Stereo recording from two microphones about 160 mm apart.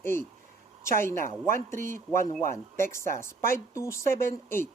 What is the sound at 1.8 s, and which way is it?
Speech, 15° left (ahead or behind).